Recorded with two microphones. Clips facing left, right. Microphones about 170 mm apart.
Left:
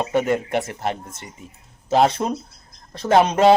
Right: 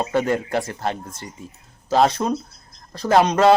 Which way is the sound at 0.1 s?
25° left (ahead or behind).